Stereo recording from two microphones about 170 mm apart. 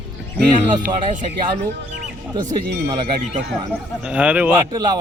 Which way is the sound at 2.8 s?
30° right (ahead or behind).